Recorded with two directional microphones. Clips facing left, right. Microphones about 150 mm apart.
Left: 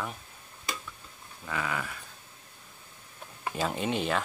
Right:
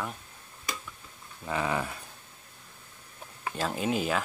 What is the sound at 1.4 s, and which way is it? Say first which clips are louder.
Speech: right 4 dB; 30° right (ahead or behind).